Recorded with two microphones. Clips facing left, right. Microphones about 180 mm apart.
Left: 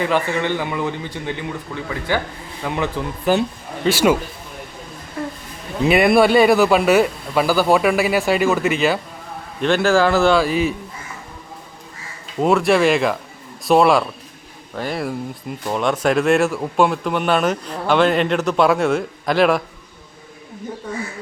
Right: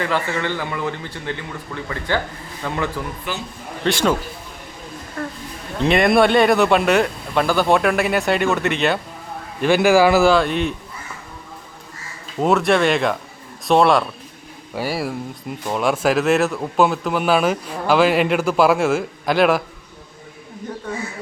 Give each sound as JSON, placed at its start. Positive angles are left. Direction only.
{"t": 0.0, "sound": "speech", "side_deg": 15}
{"t": 5.2, "sound": "a sound", "side_deg": 15}
{"t": 5.8, "sound": "speech", "side_deg": 5}
{"t": 9.6, "sound": "speech", "side_deg": -10}
{"t": 12.4, "sound": "speech", "side_deg": 0}